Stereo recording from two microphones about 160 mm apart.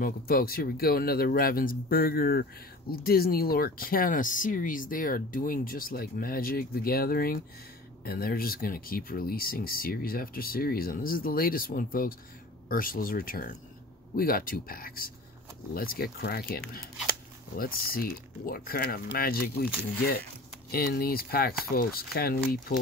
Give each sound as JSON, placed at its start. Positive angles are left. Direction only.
{"t": 0.0, "sound": "speech", "side_deg": 70}